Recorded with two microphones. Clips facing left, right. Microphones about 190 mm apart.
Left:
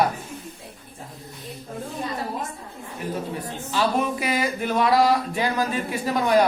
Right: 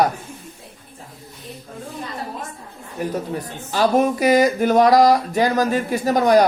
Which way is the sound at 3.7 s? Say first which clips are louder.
Right 6 dB; 45° right (ahead or behind).